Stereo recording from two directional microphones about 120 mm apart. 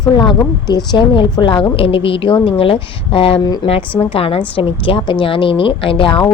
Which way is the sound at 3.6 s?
35° left (ahead or behind).